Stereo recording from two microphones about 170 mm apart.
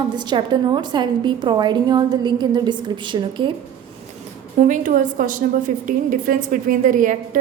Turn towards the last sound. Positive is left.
turn(degrees=-50)  # may be behind; listen again after turning